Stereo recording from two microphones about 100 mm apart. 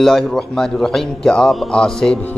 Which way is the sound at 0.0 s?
5° left (ahead or behind).